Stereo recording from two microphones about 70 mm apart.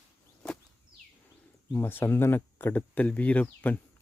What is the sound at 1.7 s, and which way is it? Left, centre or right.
Speech, left.